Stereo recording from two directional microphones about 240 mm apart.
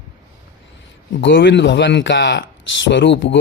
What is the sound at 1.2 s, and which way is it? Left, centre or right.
Speech, left.